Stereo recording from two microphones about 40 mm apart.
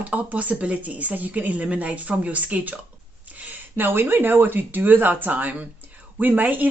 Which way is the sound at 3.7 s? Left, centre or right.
Right.